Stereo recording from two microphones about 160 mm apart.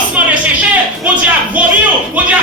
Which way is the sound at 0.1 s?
10° right (ahead or behind).